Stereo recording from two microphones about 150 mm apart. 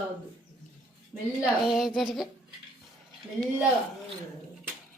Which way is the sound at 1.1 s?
15° right (ahead or behind).